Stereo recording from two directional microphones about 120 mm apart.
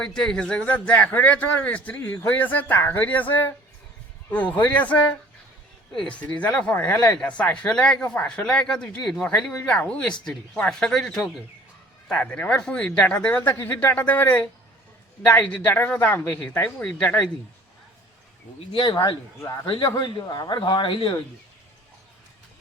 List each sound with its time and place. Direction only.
0.0 s speech: 5° left (ahead or behind)
18.7 s speech: 40° left (ahead or behind)
19.4 s a man's voice: 30° left (ahead or behind)